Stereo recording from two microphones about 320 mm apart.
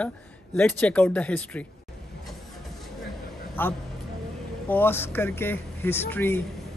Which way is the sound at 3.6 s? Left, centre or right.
Centre.